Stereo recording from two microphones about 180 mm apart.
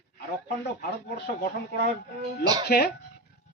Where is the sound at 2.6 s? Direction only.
60° left (ahead or behind).